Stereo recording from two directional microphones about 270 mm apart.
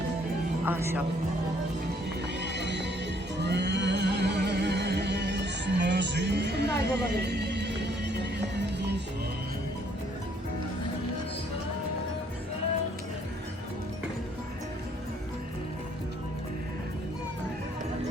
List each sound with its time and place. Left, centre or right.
0.6 s speech: centre
2.4 s music: right